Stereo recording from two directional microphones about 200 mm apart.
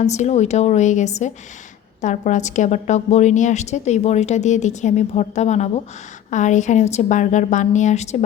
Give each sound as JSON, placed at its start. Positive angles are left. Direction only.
{"t": 0.0, "sound": "a woman's voice", "side_deg": 35}